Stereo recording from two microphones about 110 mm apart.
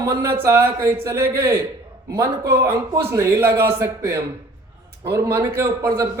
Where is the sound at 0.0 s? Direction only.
25° right (ahead or behind).